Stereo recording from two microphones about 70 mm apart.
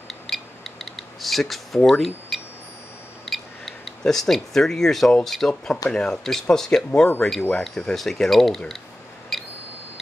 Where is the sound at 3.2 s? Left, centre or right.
Centre.